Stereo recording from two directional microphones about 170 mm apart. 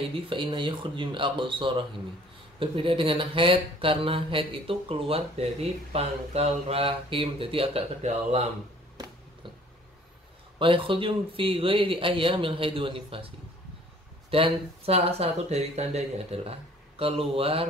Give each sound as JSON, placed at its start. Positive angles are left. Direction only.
{"t": 0.3, "sound": "speech", "side_deg": -30}
{"t": 10.6, "sound": "speech", "side_deg": -30}
{"t": 14.3, "sound": "speech", "side_deg": -35}